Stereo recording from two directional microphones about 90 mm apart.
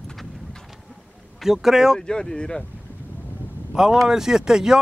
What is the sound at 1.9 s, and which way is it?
Speech, 5° left (ahead or behind).